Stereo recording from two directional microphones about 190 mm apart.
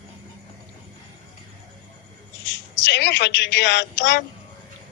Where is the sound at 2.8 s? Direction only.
65° left (ahead or behind).